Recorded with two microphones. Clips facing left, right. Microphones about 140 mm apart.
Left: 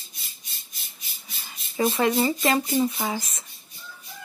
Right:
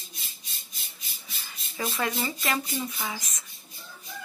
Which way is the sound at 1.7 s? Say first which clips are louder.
Left 8 dB; 30° left (ahead or behind).